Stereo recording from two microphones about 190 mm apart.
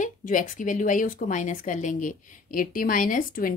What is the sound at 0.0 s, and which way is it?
A woman's voice, 45° left (ahead or behind).